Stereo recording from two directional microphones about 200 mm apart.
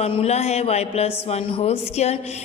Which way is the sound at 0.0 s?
30° left (ahead or behind).